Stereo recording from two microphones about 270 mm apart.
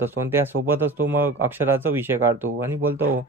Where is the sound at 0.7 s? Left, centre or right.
Centre.